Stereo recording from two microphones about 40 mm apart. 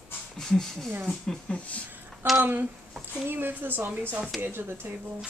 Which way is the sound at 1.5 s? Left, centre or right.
Left.